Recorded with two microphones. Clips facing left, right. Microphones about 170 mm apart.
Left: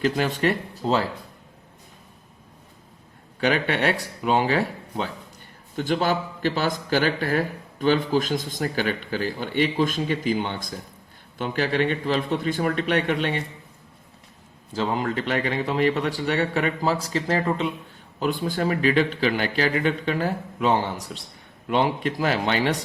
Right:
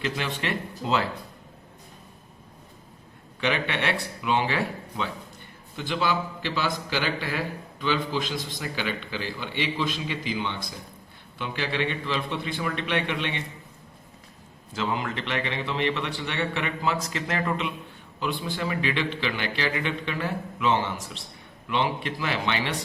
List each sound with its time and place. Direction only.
0.0 s a man's voice: 40° left (ahead or behind)
3.4 s a man's voice: 40° left (ahead or behind)
14.7 s a man's voice: 35° left (ahead or behind)